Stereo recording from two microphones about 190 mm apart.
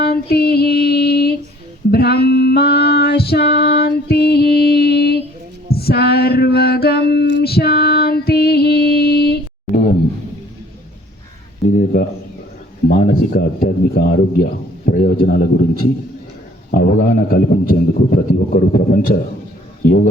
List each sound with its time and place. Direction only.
0.0 s female singing: 55° left (ahead or behind)
5.7 s music: 55° left (ahead or behind)
7.1 s female singing: 55° left (ahead or behind)
12.9 s a man's voice: 50° left (ahead or behind)
19.8 s speech: 50° left (ahead or behind)